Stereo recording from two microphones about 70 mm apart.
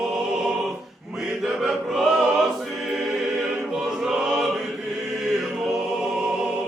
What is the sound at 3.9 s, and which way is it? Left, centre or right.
Choir, centre.